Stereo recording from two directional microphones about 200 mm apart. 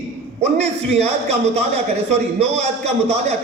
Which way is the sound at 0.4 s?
30° right (ahead or behind).